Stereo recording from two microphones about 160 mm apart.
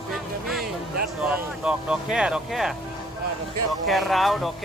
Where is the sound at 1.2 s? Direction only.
5° right (ahead or behind).